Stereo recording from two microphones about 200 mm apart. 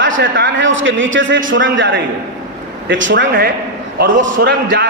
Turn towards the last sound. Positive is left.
turn(degrees=-50)  # may be behind; listen again after turning